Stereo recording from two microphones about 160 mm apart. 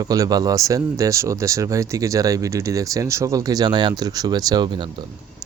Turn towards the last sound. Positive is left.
turn(degrees=-30)  # may be behind; listen again after turning